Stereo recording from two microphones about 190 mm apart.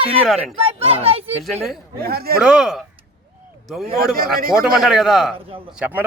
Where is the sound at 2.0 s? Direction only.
55° right (ahead or behind).